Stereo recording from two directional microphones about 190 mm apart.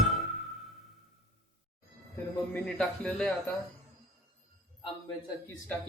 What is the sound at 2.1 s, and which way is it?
Speech, 10° left (ahead or behind).